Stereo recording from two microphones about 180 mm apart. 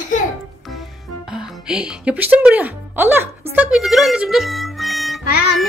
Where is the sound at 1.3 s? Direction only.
5° right (ahead or behind).